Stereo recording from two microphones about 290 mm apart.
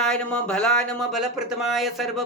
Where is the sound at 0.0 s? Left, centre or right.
Centre.